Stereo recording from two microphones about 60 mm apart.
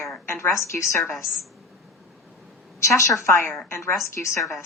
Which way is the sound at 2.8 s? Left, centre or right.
Left.